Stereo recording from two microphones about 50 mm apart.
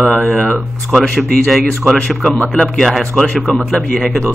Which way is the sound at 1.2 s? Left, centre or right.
Centre.